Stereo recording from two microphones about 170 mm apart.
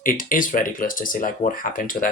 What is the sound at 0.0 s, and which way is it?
Speech, 55° left (ahead or behind).